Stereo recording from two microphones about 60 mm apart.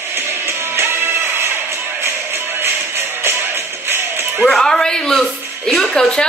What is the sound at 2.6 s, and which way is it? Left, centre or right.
Music, right.